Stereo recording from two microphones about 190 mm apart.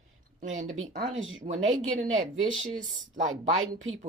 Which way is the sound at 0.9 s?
90° right.